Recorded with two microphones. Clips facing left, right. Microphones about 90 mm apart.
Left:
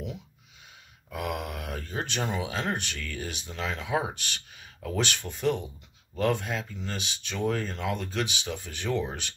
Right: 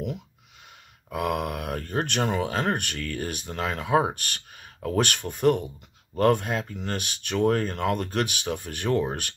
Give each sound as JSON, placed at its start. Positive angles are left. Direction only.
{"t": 1.1, "sound": "speech", "side_deg": -60}